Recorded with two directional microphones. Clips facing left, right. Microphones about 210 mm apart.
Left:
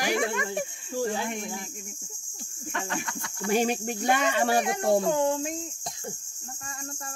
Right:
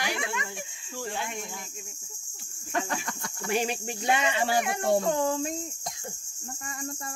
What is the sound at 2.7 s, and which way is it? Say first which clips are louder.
Cricket: right 2 dB; 45° right (ahead or behind).